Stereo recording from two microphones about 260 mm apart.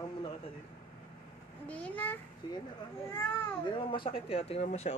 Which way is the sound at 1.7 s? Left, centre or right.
Centre.